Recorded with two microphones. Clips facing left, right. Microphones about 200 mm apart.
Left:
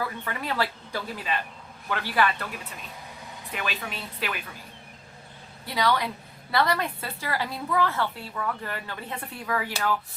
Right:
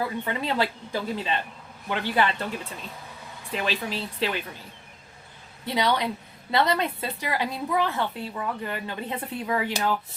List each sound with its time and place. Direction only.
0.0 s a woman's voice: 20° right (ahead or behind)
5.6 s a woman's voice: 20° right (ahead or behind)